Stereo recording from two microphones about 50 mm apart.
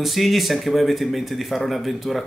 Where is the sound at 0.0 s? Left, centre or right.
Centre.